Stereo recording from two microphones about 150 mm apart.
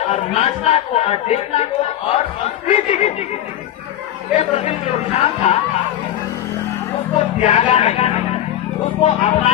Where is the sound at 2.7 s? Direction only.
50° left (ahead or behind).